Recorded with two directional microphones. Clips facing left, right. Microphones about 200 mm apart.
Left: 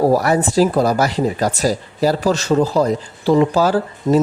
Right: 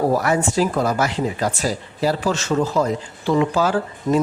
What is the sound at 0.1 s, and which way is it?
Speech, 35° left (ahead or behind).